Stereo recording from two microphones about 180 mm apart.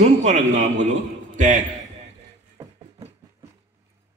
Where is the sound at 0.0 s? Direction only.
40° right (ahead or behind).